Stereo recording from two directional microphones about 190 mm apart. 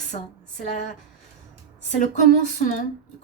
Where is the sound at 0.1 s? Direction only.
40° left (ahead or behind).